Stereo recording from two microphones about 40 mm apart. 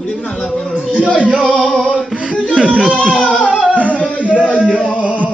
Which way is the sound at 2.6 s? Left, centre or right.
Right.